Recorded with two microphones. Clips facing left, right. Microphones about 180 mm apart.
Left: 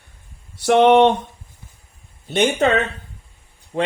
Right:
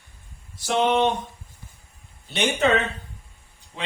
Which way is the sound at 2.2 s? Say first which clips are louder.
Left 5 dB; 45° left (ahead or behind).